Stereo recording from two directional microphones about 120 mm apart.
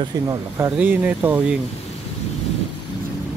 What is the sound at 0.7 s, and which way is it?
Speech, 15° right (ahead or behind).